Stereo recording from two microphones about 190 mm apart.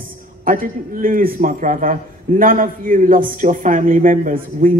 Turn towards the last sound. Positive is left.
turn(degrees=-45)  # may be behind; listen again after turning